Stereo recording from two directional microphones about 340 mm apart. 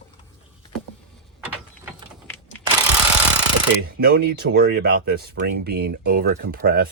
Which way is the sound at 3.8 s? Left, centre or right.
Right.